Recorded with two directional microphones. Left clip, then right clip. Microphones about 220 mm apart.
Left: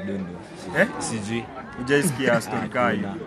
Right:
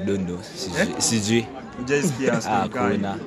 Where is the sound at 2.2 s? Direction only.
35° left (ahead or behind).